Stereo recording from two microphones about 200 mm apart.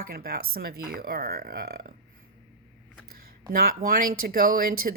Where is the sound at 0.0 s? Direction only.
50° right (ahead or behind).